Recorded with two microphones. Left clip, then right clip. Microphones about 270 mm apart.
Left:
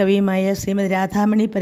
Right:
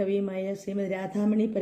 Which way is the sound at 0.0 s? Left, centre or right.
Left.